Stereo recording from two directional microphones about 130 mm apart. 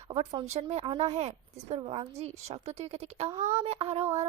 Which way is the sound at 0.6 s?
45° right (ahead or behind).